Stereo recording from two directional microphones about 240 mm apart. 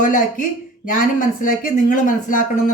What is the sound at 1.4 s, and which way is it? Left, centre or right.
Speech, left.